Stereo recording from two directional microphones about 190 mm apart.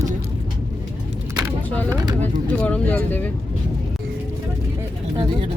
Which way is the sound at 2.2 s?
5° left (ahead or behind).